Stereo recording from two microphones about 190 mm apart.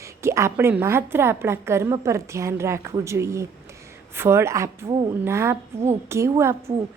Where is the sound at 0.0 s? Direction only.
15° right (ahead or behind).